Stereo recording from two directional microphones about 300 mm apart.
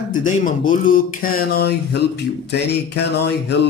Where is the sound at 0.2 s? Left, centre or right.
Left.